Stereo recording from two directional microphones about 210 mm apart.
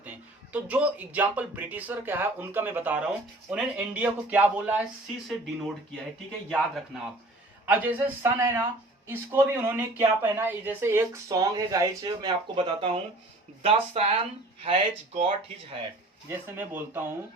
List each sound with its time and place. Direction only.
0.5 s speech: 5° right (ahead or behind)
6.5 s speech: centre (ahead or behind); by 15.3 s 25° right (ahead or behind)
16.6 s speech: 10° right (ahead or behind)